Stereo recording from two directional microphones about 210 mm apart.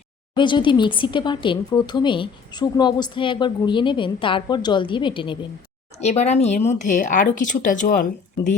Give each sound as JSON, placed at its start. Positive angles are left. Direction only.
{"t": 0.3, "sound": "speech", "side_deg": 20}